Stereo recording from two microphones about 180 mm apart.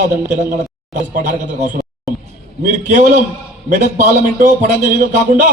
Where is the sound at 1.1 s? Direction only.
45° right (ahead or behind).